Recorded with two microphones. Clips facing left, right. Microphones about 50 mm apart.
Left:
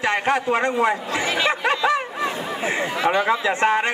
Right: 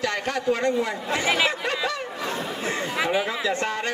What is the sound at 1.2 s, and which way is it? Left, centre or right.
Speech, centre.